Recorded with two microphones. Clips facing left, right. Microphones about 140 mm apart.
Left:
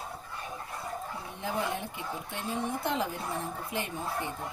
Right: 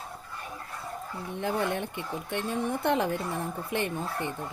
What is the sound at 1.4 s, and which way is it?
Speech, 60° right (ahead or behind).